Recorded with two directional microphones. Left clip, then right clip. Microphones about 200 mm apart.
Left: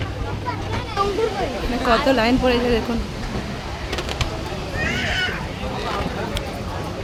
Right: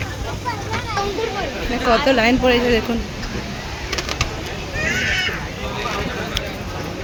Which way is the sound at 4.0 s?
10° right (ahead or behind).